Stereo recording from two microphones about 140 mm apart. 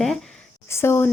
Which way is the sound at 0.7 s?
20° left (ahead or behind).